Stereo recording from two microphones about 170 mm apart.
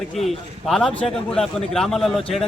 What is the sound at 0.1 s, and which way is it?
Speech, centre (ahead or behind).